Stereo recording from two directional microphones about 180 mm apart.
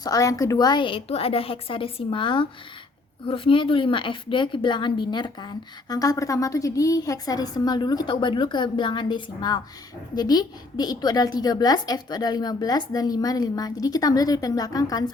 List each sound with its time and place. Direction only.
0.0 s a woman's voice: 20° left (ahead or behind)